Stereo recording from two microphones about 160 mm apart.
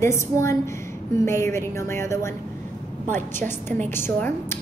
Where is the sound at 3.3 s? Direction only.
15° left (ahead or behind).